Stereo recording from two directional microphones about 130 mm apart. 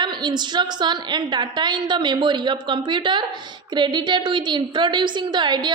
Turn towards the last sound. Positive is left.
turn(degrees=-35)  # may be behind; listen again after turning